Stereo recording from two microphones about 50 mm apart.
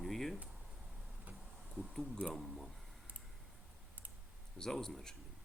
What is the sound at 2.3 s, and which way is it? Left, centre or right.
Speech, centre.